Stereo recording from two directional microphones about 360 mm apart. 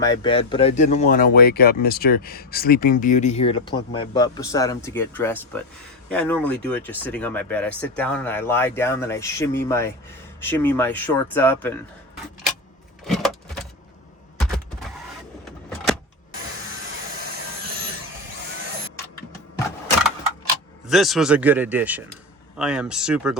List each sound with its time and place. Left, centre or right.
0.0 s speech: centre
13.1 s a sound: centre
17.2 s vacuum cleaner: right
20.8 s speech: centre